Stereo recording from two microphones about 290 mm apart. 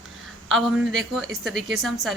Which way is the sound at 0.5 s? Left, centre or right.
Centre.